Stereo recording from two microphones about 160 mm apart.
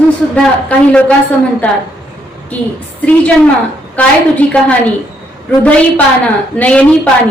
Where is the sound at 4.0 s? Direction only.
10° left (ahead or behind).